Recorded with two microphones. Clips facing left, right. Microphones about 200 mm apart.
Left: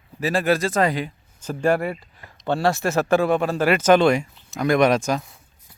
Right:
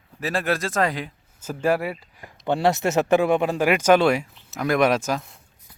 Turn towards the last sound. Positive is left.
turn(degrees=-5)  # may be behind; listen again after turning